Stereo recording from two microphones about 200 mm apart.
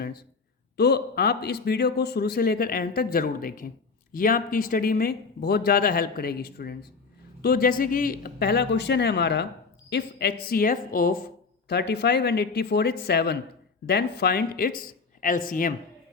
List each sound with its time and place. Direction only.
0.0 s a man's voice: 50° left (ahead or behind)